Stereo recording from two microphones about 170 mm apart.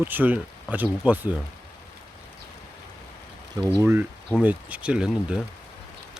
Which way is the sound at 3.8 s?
15° right (ahead or behind).